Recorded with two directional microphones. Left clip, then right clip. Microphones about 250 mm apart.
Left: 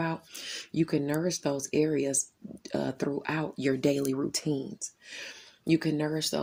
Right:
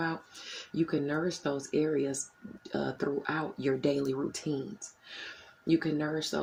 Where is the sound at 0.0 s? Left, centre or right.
Left.